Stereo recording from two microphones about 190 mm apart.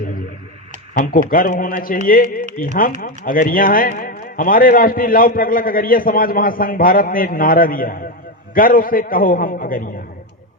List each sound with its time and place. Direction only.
0.9 s a man's voice: 50° left (ahead or behind)